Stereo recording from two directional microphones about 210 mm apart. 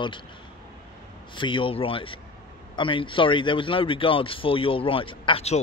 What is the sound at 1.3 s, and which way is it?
Speech, 25° left (ahead or behind).